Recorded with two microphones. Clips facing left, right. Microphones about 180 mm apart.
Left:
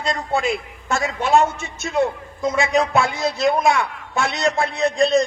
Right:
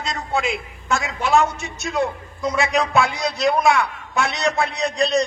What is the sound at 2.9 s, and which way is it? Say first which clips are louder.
A man's voice: even; 25° left (ahead or behind).